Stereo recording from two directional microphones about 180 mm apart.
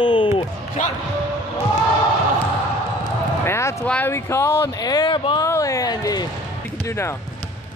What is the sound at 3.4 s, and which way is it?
Basketball bounce, 15° left (ahead or behind).